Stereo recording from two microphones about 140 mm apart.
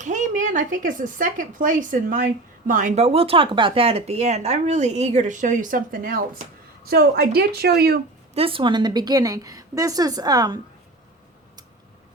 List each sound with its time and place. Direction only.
0.0 s a woman's voice: 60° right (ahead or behind); by 8.0 s 90° right
8.4 s a woman's voice: 40° right (ahead or behind)